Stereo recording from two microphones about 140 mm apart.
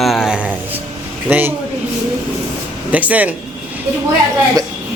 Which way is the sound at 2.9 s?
10° right (ahead or behind).